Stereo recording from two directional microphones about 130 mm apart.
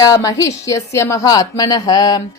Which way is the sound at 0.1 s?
25° left (ahead or behind).